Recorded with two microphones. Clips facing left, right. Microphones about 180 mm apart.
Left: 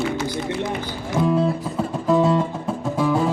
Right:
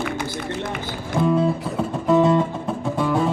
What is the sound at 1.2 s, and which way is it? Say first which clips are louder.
Music: even; centre (ahead or behind).